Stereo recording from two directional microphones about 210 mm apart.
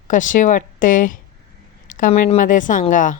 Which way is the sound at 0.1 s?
40° left (ahead or behind).